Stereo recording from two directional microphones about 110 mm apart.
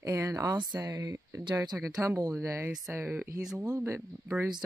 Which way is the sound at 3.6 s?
30° right (ahead or behind).